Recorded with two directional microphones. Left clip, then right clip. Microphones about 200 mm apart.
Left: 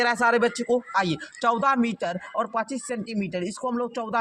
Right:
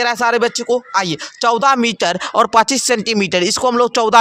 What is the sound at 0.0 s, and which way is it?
Speech, 20° right (ahead or behind).